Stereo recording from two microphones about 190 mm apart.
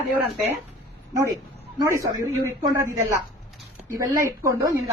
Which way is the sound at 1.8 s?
15° right (ahead or behind).